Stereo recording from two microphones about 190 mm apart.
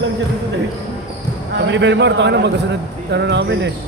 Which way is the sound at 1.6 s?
70° right (ahead or behind).